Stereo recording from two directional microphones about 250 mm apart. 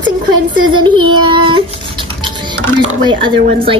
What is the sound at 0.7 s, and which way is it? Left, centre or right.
Child singing, centre.